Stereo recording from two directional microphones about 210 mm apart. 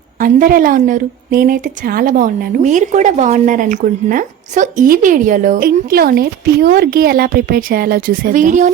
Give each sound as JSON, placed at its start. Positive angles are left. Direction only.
{"t": 0.2, "sound": "a woman's voice", "side_deg": -40}